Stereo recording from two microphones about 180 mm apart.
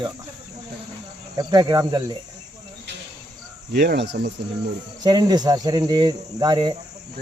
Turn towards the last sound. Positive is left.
turn(degrees=-25)  # may be behind; listen again after turning